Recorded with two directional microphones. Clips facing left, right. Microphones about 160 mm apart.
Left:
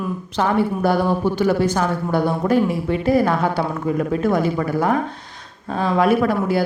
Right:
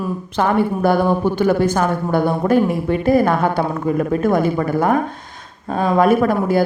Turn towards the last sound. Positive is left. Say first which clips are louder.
# right 3 dB
turn(degrees=-45)  # may be behind; listen again after turning